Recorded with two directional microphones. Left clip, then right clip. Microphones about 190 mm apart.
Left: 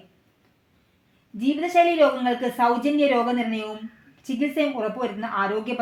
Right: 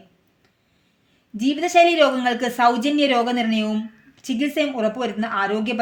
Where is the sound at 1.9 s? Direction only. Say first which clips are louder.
Right 2 dB; 35° right (ahead or behind).